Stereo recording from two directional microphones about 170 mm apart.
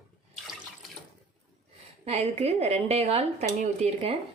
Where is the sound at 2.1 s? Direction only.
40° right (ahead or behind).